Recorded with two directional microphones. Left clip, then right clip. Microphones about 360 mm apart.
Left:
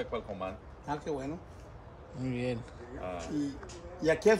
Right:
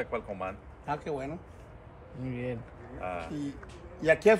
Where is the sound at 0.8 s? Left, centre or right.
Right.